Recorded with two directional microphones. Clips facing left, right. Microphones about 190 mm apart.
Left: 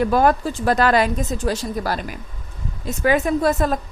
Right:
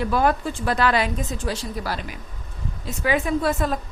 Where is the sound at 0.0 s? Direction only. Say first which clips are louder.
Left 4 dB; 45° left (ahead or behind).